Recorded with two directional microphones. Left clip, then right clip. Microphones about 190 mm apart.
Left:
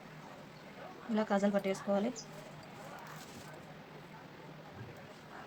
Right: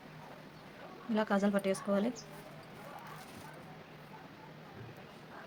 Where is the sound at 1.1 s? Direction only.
20° right (ahead or behind).